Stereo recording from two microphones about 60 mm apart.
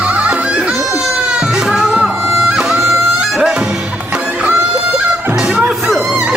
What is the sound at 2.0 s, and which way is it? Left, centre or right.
Music, centre.